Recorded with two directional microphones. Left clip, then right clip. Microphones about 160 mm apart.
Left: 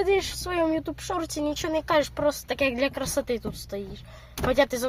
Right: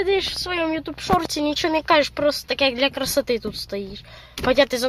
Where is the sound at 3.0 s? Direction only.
30° right (ahead or behind).